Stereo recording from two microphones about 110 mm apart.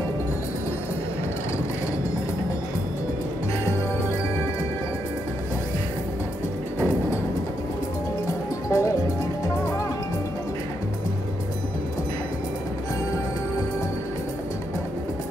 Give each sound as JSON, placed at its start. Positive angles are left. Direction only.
{"t": 8.7, "sound": "music", "side_deg": 30}